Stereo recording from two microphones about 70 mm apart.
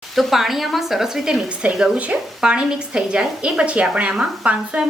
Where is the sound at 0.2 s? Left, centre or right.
Centre.